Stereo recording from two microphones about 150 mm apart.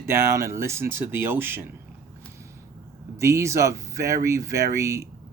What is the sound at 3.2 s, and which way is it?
Speech, 20° right (ahead or behind).